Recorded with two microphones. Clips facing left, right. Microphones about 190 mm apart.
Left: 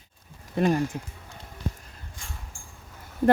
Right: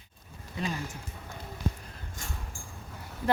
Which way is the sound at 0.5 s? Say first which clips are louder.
Left 11 dB; 55° left (ahead or behind).